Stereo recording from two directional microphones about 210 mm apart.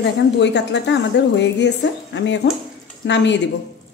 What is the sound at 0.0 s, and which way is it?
A woman's voice, 55° left (ahead or behind).